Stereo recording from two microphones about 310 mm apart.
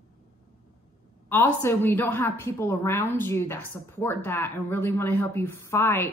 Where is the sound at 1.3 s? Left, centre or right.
Centre.